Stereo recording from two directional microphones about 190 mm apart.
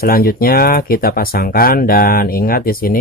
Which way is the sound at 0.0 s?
50° left (ahead or behind).